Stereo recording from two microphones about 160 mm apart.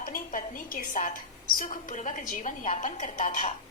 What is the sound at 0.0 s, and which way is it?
A woman's voice, 60° left (ahead or behind).